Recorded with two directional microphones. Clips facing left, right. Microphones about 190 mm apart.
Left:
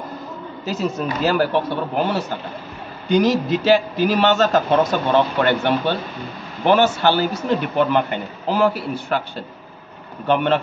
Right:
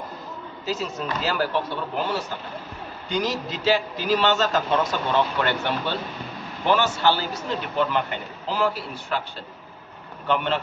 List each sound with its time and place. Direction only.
1.2 s a man's voice: 55° left (ahead or behind)
10.2 s a man's voice: 55° left (ahead or behind)